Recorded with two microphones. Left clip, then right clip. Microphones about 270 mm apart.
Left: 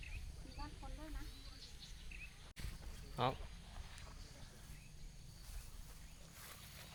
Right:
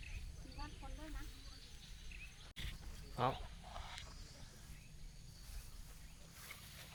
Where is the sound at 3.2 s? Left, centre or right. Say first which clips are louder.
Right 1 dB; centre.